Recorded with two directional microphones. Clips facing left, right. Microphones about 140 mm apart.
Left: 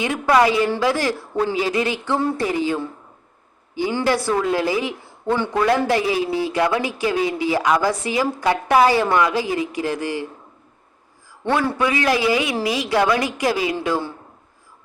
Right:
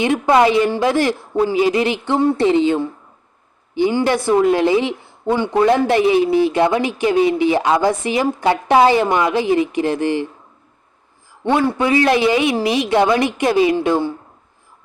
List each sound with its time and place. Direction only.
0.0 s speech: 25° right (ahead or behind)
11.4 s a man's voice: 20° right (ahead or behind)
11.9 s speech: 30° right (ahead or behind)